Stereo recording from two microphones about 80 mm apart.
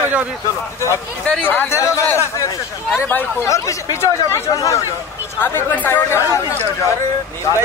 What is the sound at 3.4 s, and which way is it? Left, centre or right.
Speech, left.